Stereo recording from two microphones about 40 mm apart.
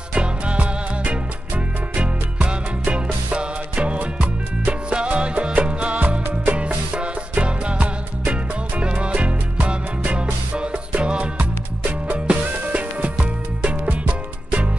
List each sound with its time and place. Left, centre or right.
0.1 s music: right
2.0 s music: right